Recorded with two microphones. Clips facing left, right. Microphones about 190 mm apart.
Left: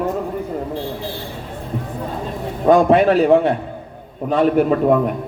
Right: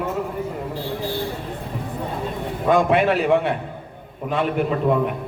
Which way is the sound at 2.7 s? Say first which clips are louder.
Left 5 dB; 35° left (ahead or behind).